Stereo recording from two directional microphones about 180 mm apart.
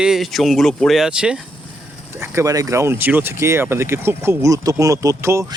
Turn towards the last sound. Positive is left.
turn(degrees=-15)  # may be behind; listen again after turning